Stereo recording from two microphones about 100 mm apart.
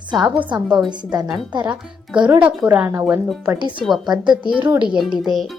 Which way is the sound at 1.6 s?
10° right (ahead or behind).